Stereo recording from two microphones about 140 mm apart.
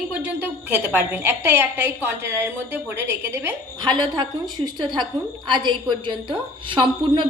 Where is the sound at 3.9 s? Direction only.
30° right (ahead or behind).